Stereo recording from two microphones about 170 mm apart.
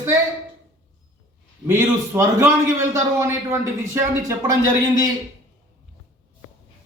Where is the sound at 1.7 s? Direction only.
15° right (ahead or behind).